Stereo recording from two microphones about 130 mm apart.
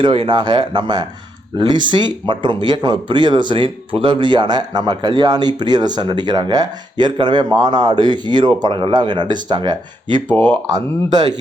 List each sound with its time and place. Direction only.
0.0 s speech: 40° right (ahead or behind)
10.3 s speech: 15° left (ahead or behind)
10.7 s speech: 30° right (ahead or behind)